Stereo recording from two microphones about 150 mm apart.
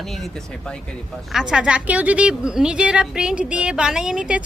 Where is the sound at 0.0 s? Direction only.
Centre (ahead or behind).